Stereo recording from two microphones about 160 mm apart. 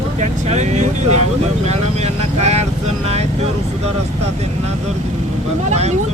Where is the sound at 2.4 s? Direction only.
40° right (ahead or behind).